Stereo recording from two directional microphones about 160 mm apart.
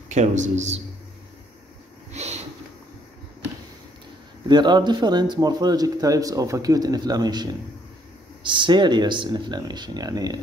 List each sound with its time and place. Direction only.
0.1 s speech: 45° right (ahead or behind)
2.1 s a sound: 45° right (ahead or behind)
4.5 s speech: 25° right (ahead or behind)
8.5 s speech: 30° right (ahead or behind)